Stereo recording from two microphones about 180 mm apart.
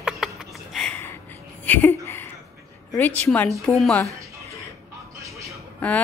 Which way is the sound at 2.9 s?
10° left (ahead or behind).